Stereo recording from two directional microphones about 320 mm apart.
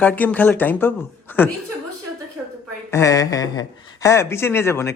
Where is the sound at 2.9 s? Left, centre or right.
Centre.